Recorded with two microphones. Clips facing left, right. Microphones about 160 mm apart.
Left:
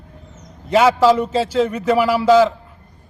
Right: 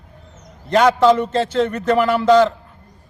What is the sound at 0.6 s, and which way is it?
A man's voice, 5° left (ahead or behind).